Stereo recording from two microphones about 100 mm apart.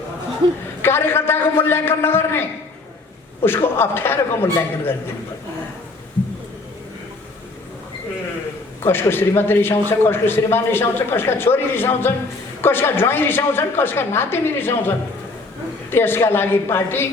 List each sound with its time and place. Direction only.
0.4 s a woman's voice: 55° right (ahead or behind)
0.8 s a man's voice: 20° left (ahead or behind)
8.8 s a man's voice: 20° left (ahead or behind)